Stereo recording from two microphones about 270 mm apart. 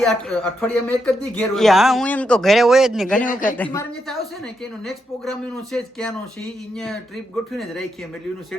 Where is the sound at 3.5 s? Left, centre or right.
Centre.